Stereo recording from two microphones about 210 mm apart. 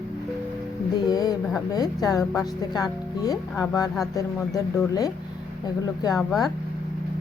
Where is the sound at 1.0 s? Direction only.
15° left (ahead or behind).